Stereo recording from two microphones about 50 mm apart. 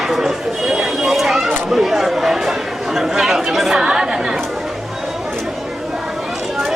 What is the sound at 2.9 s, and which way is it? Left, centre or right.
Speech, centre.